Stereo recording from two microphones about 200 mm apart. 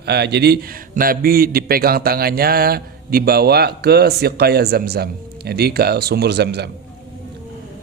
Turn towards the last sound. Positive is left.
turn(degrees=-55)  # may be behind; listen again after turning